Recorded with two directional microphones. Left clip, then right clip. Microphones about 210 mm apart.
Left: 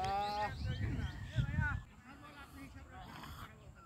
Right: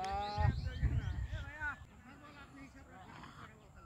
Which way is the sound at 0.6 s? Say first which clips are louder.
Left 2 dB; 35° left (ahead or behind).